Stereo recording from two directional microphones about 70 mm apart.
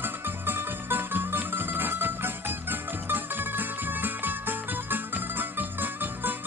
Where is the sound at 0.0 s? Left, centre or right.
Right.